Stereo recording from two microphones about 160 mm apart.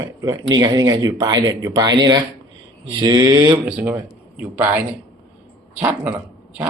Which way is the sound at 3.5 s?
10° right (ahead or behind).